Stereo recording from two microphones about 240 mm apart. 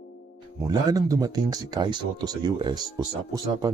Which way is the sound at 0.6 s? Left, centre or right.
Centre.